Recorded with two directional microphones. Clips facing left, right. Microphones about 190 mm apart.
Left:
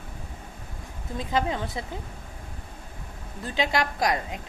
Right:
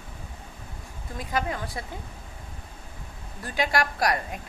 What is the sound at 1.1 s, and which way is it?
Speech, 25° left (ahead or behind).